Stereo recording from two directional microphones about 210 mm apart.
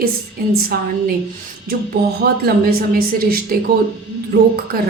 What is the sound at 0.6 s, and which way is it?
Speech, 45° right (ahead or behind).